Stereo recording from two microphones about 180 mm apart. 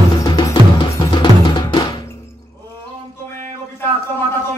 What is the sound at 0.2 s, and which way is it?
Music, 20° left (ahead or behind).